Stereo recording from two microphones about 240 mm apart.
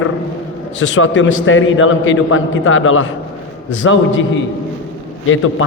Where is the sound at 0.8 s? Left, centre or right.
Left.